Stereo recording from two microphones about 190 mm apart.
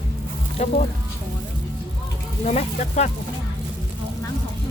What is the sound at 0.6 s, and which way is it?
Speech, 35° left (ahead or behind).